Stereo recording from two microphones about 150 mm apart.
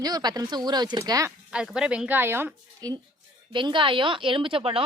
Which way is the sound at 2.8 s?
25° right (ahead or behind).